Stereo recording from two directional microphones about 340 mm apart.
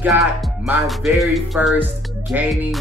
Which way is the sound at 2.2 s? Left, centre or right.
Centre.